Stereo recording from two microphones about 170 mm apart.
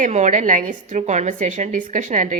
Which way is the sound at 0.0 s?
45° right (ahead or behind).